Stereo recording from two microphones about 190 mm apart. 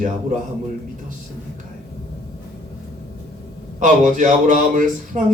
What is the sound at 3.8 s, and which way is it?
Speech, 40° right (ahead or behind).